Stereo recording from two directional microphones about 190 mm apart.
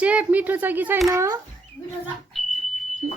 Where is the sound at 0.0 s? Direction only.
5° right (ahead or behind).